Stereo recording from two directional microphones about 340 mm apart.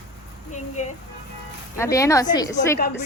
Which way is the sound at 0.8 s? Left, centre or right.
Centre.